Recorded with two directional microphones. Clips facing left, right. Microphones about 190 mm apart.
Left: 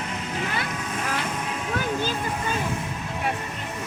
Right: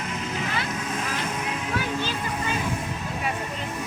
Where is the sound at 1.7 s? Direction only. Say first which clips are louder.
Left 3 dB; 45° left (ahead or behind).